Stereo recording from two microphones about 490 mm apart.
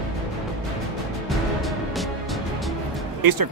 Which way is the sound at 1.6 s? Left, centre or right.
Centre.